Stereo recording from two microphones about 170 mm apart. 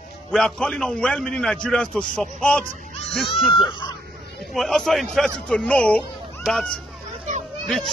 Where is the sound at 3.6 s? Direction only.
30° left (ahead or behind).